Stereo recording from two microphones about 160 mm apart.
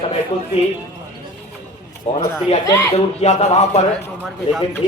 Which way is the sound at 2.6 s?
20° left (ahead or behind).